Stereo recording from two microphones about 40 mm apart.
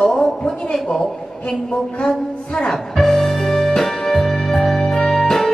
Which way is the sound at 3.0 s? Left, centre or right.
Centre.